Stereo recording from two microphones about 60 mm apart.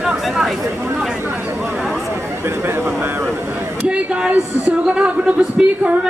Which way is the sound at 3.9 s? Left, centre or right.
Centre.